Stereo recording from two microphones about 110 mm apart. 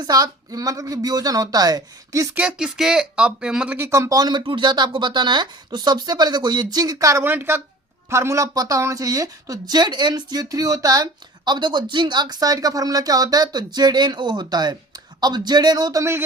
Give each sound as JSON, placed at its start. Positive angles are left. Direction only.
{"t": 0.0, "sound": "a woman's voice", "side_deg": -35}
{"t": 2.3, "sound": "speech", "side_deg": -15}
{"t": 2.6, "sound": "speech", "side_deg": -5}
{"t": 3.8, "sound": "a woman's voice", "side_deg": -25}